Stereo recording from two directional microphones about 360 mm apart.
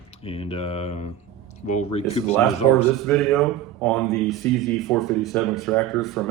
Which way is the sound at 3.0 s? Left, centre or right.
Centre.